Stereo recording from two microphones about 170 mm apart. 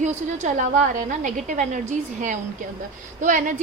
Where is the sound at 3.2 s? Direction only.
50° right (ahead or behind).